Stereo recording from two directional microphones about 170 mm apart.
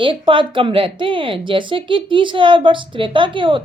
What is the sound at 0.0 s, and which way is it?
Speech, 30° right (ahead or behind).